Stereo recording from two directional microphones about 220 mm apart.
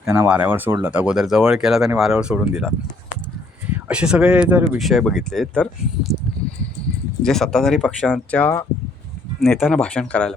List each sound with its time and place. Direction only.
0.0 s speech: 10° right (ahead or behind)
3.8 s speech: 5° right (ahead or behind)
7.2 s speech: centre (ahead or behind)